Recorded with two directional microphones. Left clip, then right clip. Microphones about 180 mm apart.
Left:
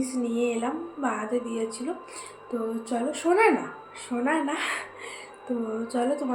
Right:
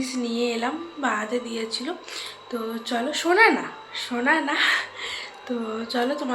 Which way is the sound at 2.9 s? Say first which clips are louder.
Right 3 dB; 10° left (ahead or behind).